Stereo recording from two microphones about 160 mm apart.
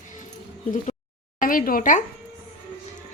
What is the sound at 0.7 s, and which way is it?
Speech, 50° left (ahead or behind).